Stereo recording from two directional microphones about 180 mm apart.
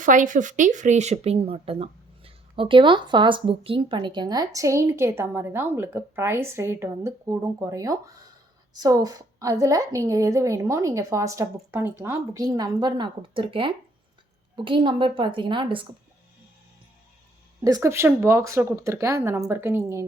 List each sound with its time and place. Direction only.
0.0 s a woman's voice: 45° right (ahead or behind); by 15.9 s 25° right (ahead or behind)
17.6 s a woman's voice: 20° right (ahead or behind)